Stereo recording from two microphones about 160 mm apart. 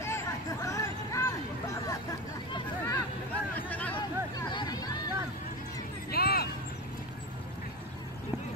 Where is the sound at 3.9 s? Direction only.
30° left (ahead or behind).